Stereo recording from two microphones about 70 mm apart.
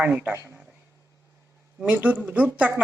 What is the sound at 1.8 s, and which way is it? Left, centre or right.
Speech, centre.